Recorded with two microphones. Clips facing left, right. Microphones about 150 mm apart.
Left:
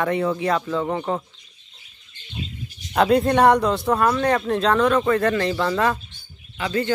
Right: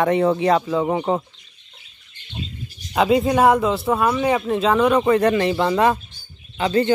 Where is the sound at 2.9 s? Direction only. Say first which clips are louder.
Even; 5° right (ahead or behind).